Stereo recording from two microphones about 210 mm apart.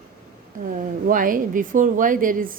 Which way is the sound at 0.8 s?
40° right (ahead or behind).